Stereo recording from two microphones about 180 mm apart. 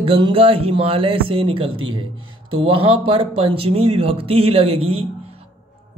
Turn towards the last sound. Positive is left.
turn(degrees=-35)  # may be behind; listen again after turning